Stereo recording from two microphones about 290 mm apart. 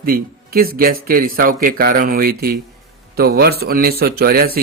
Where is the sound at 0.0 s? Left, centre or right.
Right.